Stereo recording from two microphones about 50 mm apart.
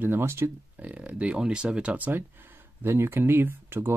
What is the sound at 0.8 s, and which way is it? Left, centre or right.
Speech, right.